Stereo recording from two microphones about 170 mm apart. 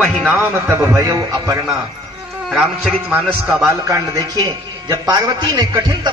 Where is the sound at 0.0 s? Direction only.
Centre (ahead or behind).